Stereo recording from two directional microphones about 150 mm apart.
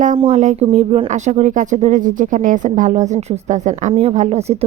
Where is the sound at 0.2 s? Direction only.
45° right (ahead or behind).